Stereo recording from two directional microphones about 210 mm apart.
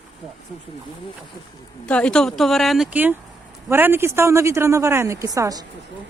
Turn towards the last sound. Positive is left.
turn(degrees=-15)  # may be behind; listen again after turning